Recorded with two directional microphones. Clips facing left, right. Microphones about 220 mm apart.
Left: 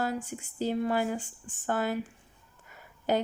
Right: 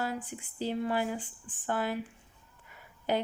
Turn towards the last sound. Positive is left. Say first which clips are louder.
# left 3 dB
turn(degrees=45)  # may be behind; listen again after turning